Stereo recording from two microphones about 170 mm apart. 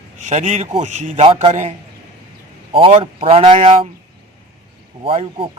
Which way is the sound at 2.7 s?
30° right (ahead or behind).